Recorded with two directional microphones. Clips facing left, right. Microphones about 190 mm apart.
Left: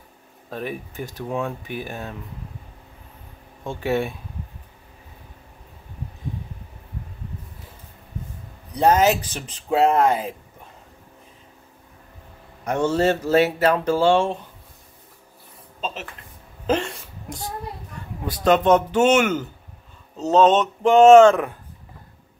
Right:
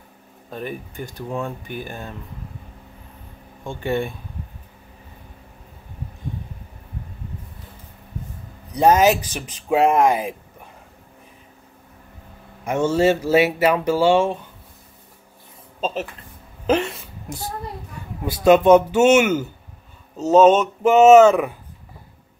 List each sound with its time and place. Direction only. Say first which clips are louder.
0.5 s speech: even; centre (ahead or behind)
3.6 s speech: even; centre (ahead or behind)
8.7 s speech: right 2 dB; 10° right (ahead or behind)
12.6 s speech: right 2 dB; 10° right (ahead or behind)
15.8 s speech: right 6 dB; 40° right (ahead or behind)
16.7 s speech: right 3 dB; 5° right (ahead or behind)